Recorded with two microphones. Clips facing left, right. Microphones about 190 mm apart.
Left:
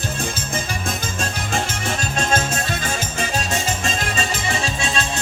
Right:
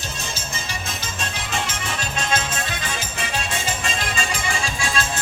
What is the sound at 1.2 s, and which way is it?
Music, 45° left (ahead or behind).